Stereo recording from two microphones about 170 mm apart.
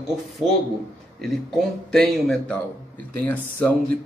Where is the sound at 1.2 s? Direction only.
Centre (ahead or behind).